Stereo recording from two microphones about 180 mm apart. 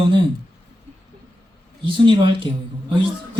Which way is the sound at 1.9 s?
30° right (ahead or behind).